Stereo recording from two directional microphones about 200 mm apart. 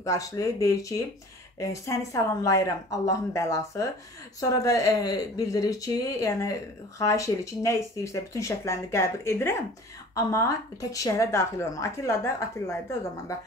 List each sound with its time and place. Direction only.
0.0 s speech: 15° left (ahead or behind)